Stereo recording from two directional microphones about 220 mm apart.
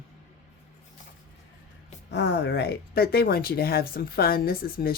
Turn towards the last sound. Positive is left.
turn(degrees=40)  # may be behind; listen again after turning